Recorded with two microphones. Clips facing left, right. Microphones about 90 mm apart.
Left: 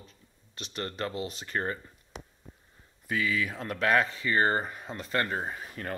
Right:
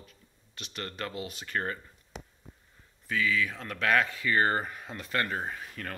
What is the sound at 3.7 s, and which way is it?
Speech, 30° left (ahead or behind).